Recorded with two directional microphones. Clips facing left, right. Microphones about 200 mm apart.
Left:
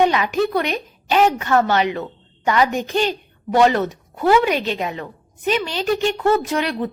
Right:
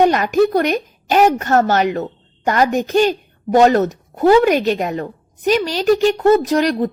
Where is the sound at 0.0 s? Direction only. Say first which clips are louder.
Right 4 dB; 45° right (ahead or behind).